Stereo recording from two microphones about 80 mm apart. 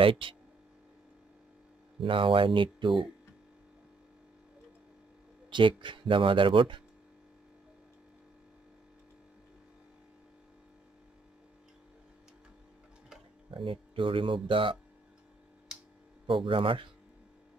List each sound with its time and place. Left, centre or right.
0.0 s speech: right
2.0 s speech: right
5.5 s speech: right
13.5 s speech: right
16.3 s speech: right